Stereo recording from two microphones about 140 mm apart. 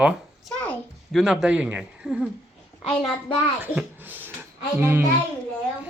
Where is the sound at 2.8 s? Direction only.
35° left (ahead or behind).